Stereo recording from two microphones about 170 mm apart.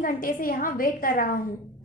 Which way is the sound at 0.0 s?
55° left (ahead or behind).